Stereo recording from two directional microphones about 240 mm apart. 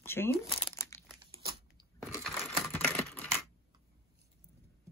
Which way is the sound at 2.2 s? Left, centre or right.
Centre.